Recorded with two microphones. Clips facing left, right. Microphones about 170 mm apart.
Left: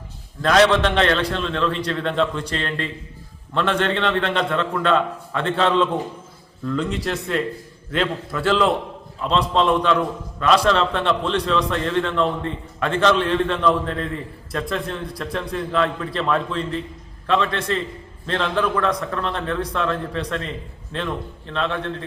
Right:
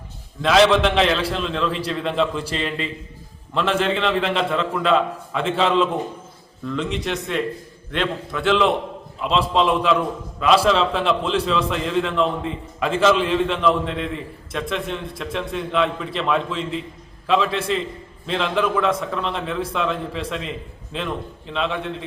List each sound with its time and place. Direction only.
0.4 s a man's voice: centre (ahead or behind)